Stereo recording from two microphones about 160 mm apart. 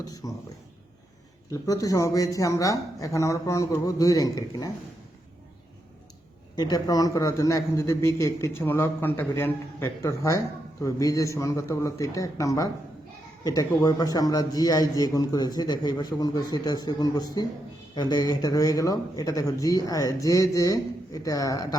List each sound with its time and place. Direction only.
0.1 s a man's voice: 20° left (ahead or behind)
1.5 s a man's voice: 20° left (ahead or behind)
6.6 s a man's voice: 25° left (ahead or behind)